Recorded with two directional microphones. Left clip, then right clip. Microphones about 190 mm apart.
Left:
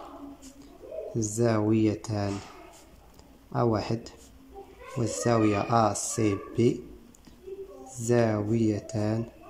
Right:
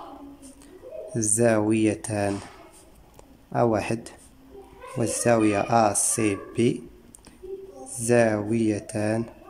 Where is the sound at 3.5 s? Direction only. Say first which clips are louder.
Right 4 dB; 15° right (ahead or behind).